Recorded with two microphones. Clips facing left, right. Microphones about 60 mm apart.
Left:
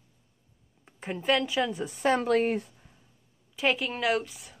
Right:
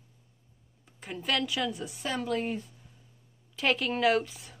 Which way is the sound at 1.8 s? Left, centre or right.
Left.